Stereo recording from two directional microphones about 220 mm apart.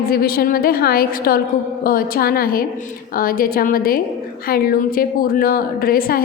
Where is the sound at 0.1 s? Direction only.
45° left (ahead or behind).